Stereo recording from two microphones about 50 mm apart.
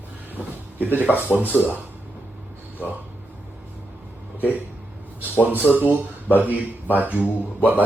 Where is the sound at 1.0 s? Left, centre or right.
Right.